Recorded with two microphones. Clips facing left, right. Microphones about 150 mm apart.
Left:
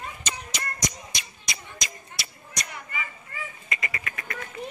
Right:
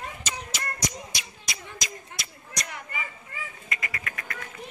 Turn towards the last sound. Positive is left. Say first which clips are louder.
# left 1 dB
turn(degrees=0)  # may be behind; listen again after turning